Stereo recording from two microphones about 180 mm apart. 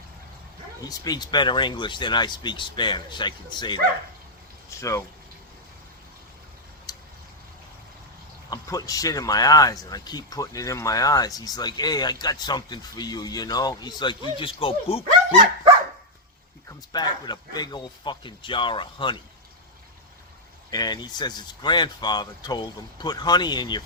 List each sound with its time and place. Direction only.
0.8 s speech: 20° left (ahead or behind)
4.8 s speech: 15° left (ahead or behind)
6.9 s a sound: 20° left (ahead or behind)
8.4 s speech: 20° left (ahead or behind)
16.6 s speech: 25° left (ahead or behind)
20.7 s speech: 20° left (ahead or behind)